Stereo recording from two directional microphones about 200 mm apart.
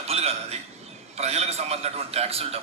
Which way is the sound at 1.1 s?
30° right (ahead or behind).